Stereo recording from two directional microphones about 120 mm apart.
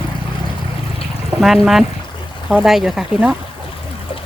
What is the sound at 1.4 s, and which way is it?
Speech, 5° right (ahead or behind).